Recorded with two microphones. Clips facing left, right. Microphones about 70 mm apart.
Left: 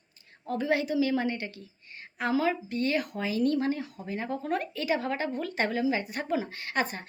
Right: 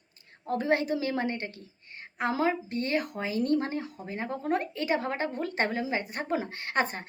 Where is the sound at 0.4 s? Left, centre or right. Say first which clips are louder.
Right 1 dB; right.